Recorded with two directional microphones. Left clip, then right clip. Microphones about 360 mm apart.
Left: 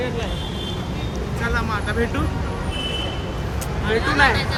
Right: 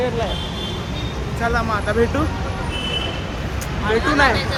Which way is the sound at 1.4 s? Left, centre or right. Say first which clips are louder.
Right 4 dB; centre.